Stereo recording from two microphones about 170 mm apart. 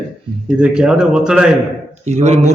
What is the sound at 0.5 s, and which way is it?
Speech, 5° right (ahead or behind).